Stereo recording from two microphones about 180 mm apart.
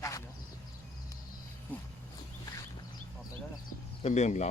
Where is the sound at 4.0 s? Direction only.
40° left (ahead or behind).